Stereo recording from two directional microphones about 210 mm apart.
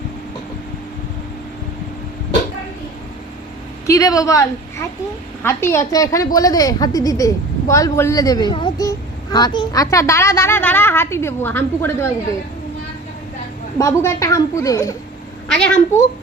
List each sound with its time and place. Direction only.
3.8 s a woman's voice: 15° left (ahead or behind)
13.7 s a woman's voice: 15° left (ahead or behind)
15.4 s a child's voice: 5° left (ahead or behind)